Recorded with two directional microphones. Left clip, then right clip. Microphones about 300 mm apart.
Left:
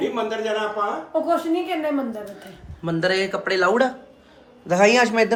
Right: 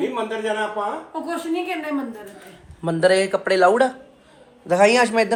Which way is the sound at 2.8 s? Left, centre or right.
Centre.